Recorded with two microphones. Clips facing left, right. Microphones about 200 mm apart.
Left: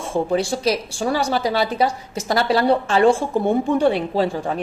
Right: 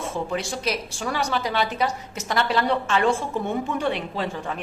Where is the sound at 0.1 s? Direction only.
35° left (ahead or behind).